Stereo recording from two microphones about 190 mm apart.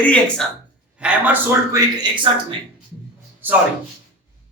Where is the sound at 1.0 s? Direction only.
5° right (ahead or behind).